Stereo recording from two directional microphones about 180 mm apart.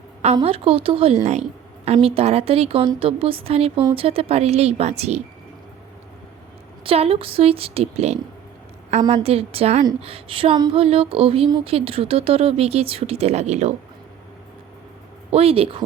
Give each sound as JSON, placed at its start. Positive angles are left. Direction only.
{"t": 0.4, "sound": "speech", "side_deg": -35}
{"t": 6.8, "sound": "speech", "side_deg": -30}
{"t": 15.3, "sound": "speech", "side_deg": -35}